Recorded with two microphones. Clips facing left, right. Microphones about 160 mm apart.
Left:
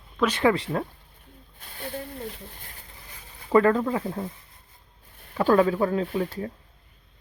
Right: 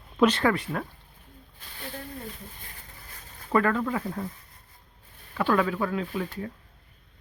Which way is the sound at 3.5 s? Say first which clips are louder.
Left 5 dB; 30° left (ahead or behind).